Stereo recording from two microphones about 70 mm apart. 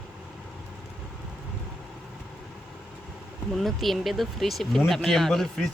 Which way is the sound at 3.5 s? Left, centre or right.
Centre.